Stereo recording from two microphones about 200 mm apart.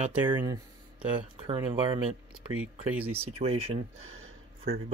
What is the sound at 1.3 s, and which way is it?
Speech, 25° right (ahead or behind).